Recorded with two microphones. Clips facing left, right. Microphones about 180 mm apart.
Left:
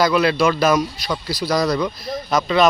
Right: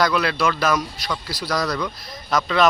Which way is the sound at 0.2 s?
25° left (ahead or behind).